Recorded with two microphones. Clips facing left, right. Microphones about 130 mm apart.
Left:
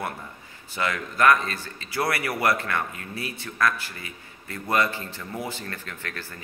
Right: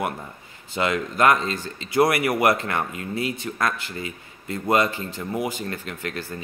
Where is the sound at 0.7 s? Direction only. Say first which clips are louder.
Right 5 dB; 20° right (ahead or behind).